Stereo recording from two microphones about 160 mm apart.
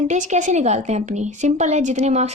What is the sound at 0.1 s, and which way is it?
A woman's voice, 50° right (ahead or behind).